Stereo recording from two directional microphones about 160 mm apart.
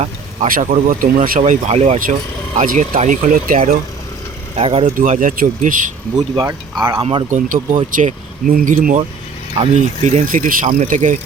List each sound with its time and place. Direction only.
0.4 s speech: 55° right (ahead or behind)
1.4 s speech: 45° right (ahead or behind)
4.5 s speech: 35° right (ahead or behind)
4.9 s speech: 55° right (ahead or behind)
6.3 s speech: 25° right (ahead or behind)
7.3 s speech: 55° right (ahead or behind)